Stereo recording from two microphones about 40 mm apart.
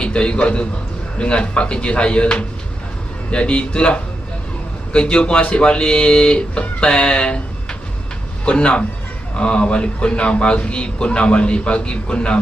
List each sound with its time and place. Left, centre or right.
0.0 s a man's voice: left
8.5 s a man's voice: left